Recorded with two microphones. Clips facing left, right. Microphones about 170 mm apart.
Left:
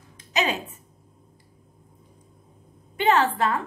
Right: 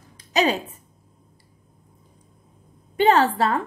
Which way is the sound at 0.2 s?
35° right (ahead or behind).